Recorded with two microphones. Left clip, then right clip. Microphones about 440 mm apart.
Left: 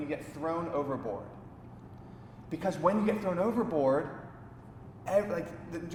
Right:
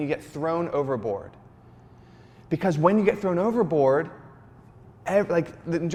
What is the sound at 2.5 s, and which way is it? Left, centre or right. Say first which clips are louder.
Speech: right 7 dB; right.